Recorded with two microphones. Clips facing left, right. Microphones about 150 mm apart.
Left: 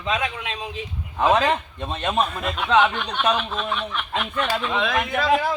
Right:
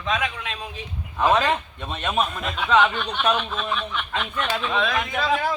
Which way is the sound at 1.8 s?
30° left (ahead or behind).